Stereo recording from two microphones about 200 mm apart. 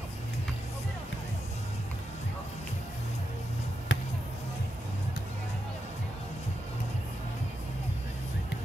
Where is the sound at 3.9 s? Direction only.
70° left (ahead or behind).